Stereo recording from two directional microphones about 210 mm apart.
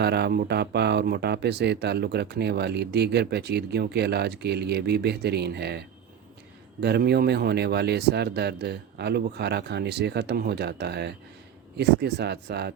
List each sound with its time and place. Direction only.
0.0 s speech: 50° right (ahead or behind)